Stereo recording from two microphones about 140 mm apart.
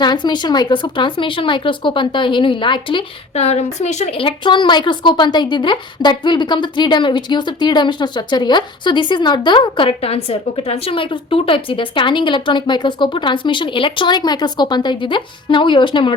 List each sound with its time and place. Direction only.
0.0 s a woman's voice: 30° left (ahead or behind)
3.3 s a woman's voice: 50° left (ahead or behind)
4.2 s a woman's voice: 35° left (ahead or behind)